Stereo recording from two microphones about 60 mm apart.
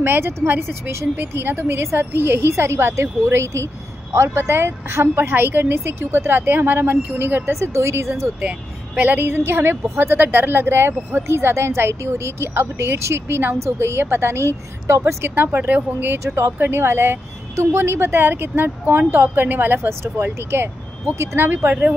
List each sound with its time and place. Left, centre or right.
0.0 s a woman's voice: right
7.5 s a woman's voice: right
8.4 s a woman's voice: right
15.2 s a woman's voice: right